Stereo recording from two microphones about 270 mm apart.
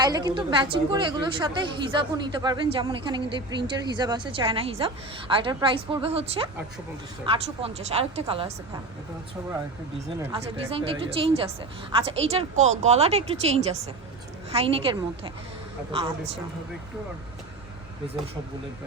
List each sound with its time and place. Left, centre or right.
0.0 s a woman's voice: centre
10.3 s a woman's voice: centre